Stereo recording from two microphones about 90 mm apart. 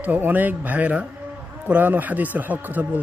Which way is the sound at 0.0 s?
20° right (ahead or behind).